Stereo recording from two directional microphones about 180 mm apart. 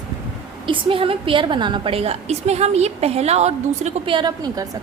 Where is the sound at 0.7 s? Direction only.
30° right (ahead or behind).